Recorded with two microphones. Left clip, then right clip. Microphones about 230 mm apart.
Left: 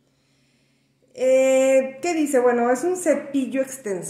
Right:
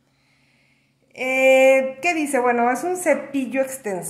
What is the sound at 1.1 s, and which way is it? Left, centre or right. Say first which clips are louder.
Speech: right 1 dB; centre.